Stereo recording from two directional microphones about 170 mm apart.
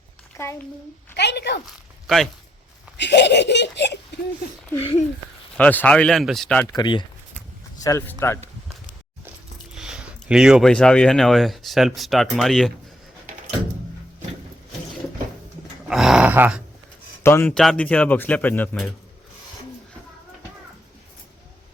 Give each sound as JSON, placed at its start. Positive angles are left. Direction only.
{"t": 0.4, "sound": "a child's voice", "side_deg": 15}
{"t": 1.1, "sound": "speech", "side_deg": 80}
{"t": 2.0, "sound": "speech", "side_deg": 0}
{"t": 3.0, "sound": "speech", "side_deg": 90}
{"t": 4.8, "sound": "speech", "side_deg": 35}
{"t": 5.5, "sound": "speech", "side_deg": 10}
{"t": 6.7, "sound": "speech", "side_deg": 25}
{"t": 7.9, "sound": "speech", "side_deg": 15}
{"t": 9.7, "sound": "speech", "side_deg": -5}
{"t": 15.9, "sound": "a sound", "side_deg": -5}
{"t": 17.2, "sound": "speech", "side_deg": 10}